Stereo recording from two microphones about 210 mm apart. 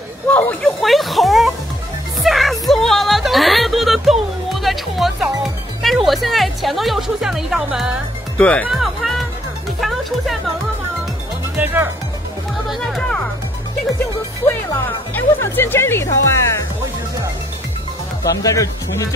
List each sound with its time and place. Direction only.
0.3 s speech: 5° left (ahead or behind)
2.2 s music: centre (ahead or behind)
8.5 s speech: 5° left (ahead or behind)
11.5 s speech: 10° right (ahead or behind)
12.6 s music: centre (ahead or behind)
14.5 s speech: 10° left (ahead or behind)
18.4 s speech: 15° left (ahead or behind)